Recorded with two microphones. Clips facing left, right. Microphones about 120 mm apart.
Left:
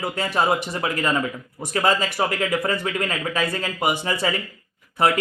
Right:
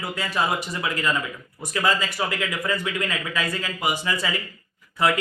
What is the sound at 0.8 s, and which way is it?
A man's voice, 30° left (ahead or behind).